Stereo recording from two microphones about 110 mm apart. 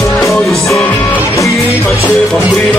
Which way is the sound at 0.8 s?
15° left (ahead or behind).